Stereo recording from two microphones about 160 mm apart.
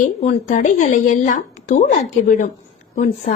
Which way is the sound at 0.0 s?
50° left (ahead or behind).